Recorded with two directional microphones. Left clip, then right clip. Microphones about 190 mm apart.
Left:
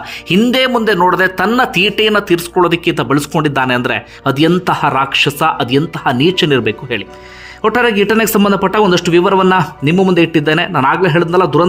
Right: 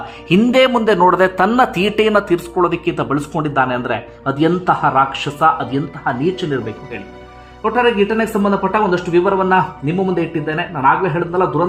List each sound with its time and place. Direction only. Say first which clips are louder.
0.5 s a man's voice: right 1 dB; 10° left (ahead or behind); by 11.6 s 30° left (ahead or behind)